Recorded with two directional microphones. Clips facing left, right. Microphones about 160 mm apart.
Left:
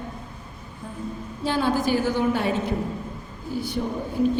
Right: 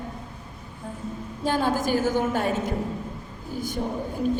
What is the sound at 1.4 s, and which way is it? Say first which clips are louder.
A woman's voice: left 1 dB; 45° right (ahead or behind).